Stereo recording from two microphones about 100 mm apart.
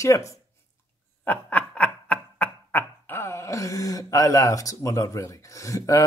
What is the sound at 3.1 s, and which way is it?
Speech, 25° left (ahead or behind).